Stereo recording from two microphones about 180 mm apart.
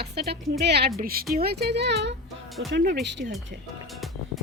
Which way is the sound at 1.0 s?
55° right (ahead or behind).